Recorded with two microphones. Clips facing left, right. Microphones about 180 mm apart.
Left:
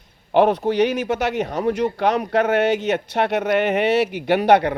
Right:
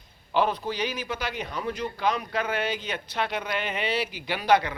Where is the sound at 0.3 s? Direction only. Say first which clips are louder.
Left 9 dB; 65° left (ahead or behind).